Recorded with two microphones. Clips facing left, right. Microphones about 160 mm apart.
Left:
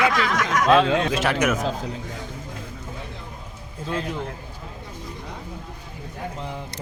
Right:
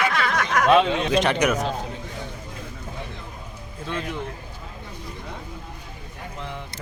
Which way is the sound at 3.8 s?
35° left (ahead or behind).